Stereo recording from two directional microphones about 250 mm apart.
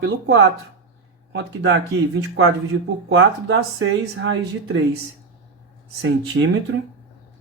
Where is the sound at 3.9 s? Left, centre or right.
Right.